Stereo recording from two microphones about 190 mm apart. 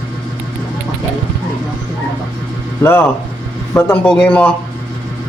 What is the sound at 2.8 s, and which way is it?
A man's voice, 10° left (ahead or behind).